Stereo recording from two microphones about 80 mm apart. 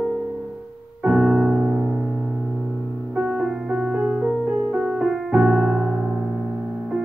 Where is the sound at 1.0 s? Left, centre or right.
Centre.